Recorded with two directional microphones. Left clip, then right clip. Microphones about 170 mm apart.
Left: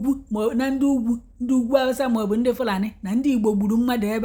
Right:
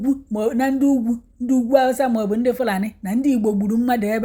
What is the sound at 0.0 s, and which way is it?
A woman's voice, 10° right (ahead or behind).